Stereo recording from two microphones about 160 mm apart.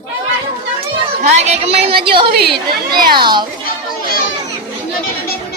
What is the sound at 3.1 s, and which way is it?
Speech, 30° right (ahead or behind).